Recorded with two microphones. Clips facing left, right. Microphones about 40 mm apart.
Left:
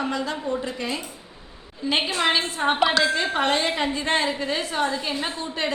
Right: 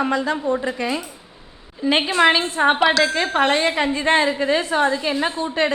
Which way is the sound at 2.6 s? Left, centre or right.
Right.